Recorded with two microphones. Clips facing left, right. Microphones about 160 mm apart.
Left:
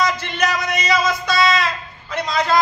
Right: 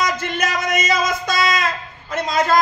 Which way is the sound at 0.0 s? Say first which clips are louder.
Left 1 dB; 50° right (ahead or behind).